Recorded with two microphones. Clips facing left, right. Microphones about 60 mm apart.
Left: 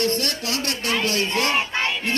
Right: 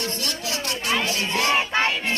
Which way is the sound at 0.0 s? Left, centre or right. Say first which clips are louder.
Left 5 dB; left.